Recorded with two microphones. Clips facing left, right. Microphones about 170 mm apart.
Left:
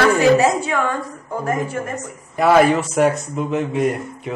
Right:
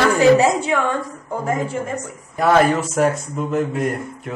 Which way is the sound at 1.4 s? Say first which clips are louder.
Even; 15° right (ahead or behind).